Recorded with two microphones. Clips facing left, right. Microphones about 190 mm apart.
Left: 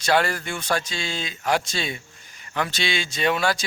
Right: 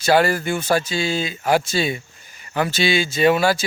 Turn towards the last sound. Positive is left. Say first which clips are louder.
# right 6 dB
turn(degrees=-5)  # may be behind; listen again after turning